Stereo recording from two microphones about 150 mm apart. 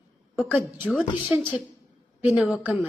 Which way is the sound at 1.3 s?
15° right (ahead or behind).